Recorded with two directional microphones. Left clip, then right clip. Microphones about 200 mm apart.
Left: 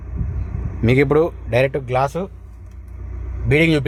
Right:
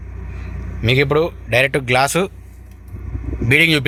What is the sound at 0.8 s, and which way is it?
Speech, 25° left (ahead or behind).